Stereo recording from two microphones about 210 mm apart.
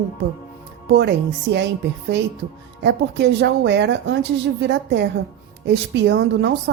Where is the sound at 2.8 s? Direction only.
55° right (ahead or behind).